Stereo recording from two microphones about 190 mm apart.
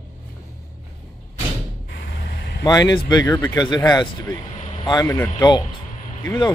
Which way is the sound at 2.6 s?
20° left (ahead or behind).